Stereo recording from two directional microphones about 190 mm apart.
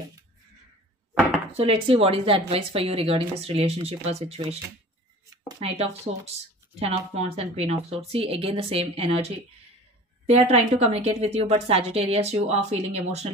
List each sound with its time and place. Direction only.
1.6 s a woman's voice: 30° right (ahead or behind)
5.6 s a woman's voice: 30° right (ahead or behind)
10.2 s a woman's voice: 35° right (ahead or behind)